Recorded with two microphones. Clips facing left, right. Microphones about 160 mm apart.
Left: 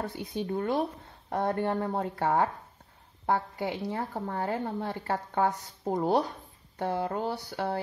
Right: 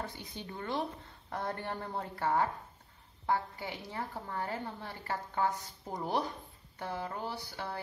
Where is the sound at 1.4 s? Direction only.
60° left (ahead or behind).